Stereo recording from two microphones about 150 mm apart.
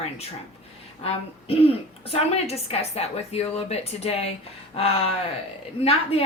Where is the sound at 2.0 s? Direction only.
45° left (ahead or behind).